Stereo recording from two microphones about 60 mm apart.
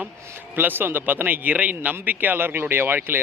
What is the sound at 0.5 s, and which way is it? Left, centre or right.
A man's voice, right.